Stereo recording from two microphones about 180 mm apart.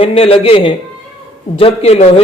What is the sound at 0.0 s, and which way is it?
A man's voice, 30° left (ahead or behind).